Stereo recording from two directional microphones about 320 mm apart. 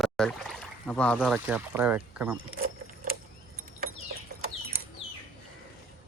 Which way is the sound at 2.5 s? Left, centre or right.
Right.